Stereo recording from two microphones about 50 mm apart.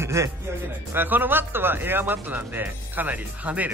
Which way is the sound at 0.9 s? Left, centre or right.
Right.